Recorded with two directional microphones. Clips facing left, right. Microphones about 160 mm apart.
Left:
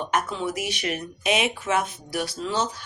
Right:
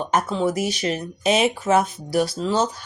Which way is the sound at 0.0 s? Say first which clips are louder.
Right 5 dB; 35° right (ahead or behind).